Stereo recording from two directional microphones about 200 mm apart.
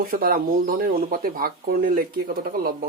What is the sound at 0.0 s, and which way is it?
Speech, 45° right (ahead or behind).